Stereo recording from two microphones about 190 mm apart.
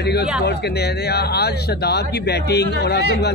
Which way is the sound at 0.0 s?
60° left (ahead or behind).